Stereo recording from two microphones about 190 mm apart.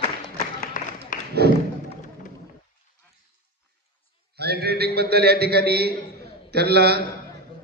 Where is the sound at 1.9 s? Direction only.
40° left (ahead or behind).